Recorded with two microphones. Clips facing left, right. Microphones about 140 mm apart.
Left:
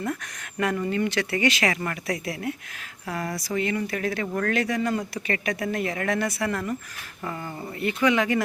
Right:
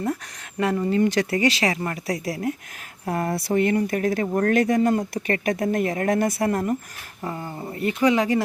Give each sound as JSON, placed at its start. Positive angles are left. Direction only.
{"t": 0.6, "sound": "speech", "side_deg": -30}
{"t": 3.1, "sound": "speech", "side_deg": -50}
{"t": 4.5, "sound": "speech", "side_deg": -45}
{"t": 7.3, "sound": "speech", "side_deg": -25}
{"t": 7.8, "sound": "speech", "side_deg": -35}